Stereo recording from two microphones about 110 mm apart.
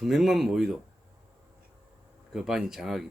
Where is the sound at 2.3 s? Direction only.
5° right (ahead or behind).